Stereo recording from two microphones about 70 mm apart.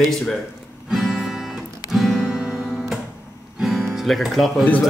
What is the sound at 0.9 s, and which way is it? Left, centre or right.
Music, centre.